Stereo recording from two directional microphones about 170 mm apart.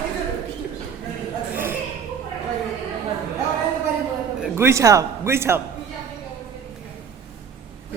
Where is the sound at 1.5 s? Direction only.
10° right (ahead or behind).